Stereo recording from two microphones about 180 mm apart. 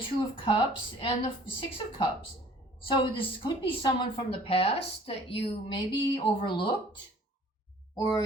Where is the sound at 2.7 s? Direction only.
30° left (ahead or behind).